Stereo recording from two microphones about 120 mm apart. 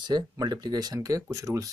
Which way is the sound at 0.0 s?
35° right (ahead or behind).